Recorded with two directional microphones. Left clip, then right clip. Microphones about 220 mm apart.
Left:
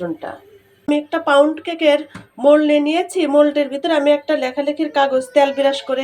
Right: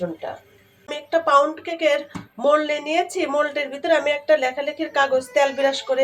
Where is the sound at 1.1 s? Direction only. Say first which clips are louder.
Left 2 dB; 30° left (ahead or behind).